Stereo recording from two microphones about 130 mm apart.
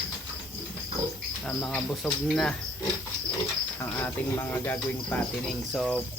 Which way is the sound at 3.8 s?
20° left (ahead or behind).